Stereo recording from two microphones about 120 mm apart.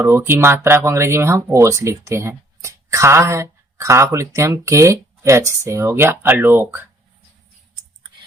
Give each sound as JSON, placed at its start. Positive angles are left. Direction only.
{"t": 0.0, "sound": "speech", "side_deg": -20}